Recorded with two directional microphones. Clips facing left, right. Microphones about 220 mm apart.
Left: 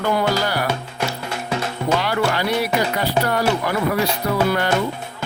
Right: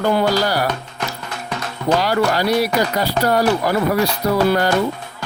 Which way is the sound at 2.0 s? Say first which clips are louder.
Right 3 dB; 40° right (ahead or behind).